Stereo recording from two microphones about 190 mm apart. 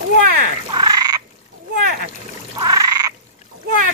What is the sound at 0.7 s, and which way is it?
Frog, 20° right (ahead or behind).